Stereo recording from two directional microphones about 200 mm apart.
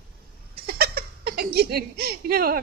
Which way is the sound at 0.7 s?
50° right (ahead or behind).